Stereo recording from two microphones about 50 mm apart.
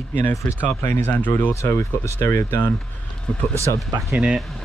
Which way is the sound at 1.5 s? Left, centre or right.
Left.